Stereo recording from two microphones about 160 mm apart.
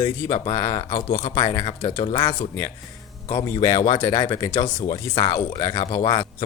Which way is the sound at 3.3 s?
25° left (ahead or behind).